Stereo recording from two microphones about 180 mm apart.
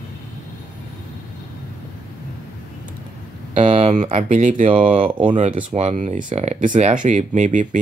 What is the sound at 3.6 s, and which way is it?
Speech, 35° right (ahead or behind).